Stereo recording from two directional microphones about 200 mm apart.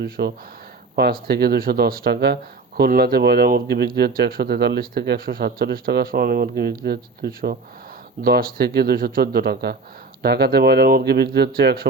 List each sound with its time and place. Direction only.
0.0 s speech: 55° right (ahead or behind)